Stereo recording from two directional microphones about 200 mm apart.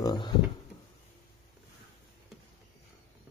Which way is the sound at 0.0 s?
20° left (ahead or behind).